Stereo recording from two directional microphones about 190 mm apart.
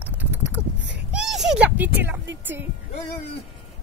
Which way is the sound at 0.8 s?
70° right (ahead or behind).